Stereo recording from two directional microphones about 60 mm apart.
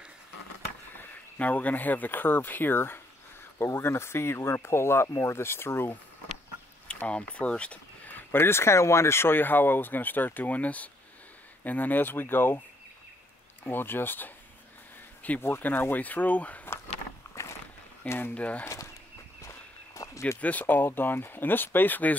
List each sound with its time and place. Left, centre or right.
0.9 s speech: left
6.9 s speech: centre; by 12.5 s left
13.7 s speech: left
15.4 s speech: left
18.0 s speech: left
18.3 s speech: left
19.4 s walk: left
20.3 s speech: left